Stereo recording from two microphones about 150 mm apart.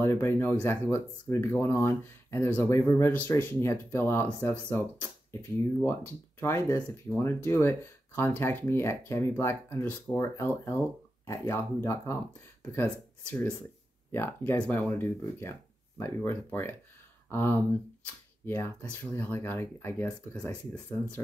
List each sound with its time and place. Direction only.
0.0 s speech: 15° left (ahead or behind)
14.1 s speech: 15° left (ahead or behind)